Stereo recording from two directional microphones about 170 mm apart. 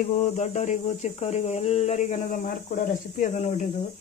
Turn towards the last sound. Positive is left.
turn(degrees=45)  # may be behind; listen again after turning